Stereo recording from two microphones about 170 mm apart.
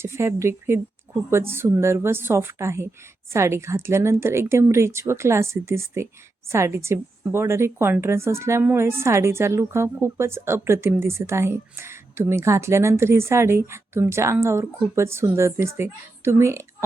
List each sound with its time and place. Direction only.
0.0 s a woman's voice: 15° right (ahead or behind)